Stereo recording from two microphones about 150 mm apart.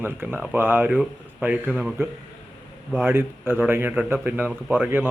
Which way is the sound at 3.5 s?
15° right (ahead or behind).